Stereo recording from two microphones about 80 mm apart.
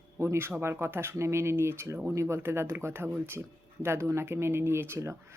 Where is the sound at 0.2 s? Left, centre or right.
Right.